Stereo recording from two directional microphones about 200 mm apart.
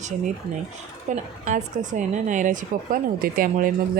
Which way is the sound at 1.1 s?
35° right (ahead or behind).